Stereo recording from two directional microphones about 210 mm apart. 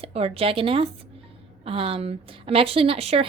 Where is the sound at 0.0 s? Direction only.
30° right (ahead or behind).